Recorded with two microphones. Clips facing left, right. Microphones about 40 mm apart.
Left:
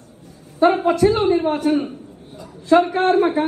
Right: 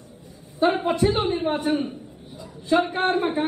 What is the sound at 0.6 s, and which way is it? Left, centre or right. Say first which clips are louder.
A woman's voice: left 5 dB; left.